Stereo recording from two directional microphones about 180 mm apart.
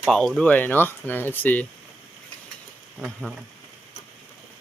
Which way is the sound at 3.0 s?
Centre (ahead or behind).